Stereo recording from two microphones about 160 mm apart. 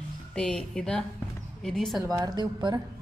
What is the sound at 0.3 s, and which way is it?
A woman's voice, 5° left (ahead or behind).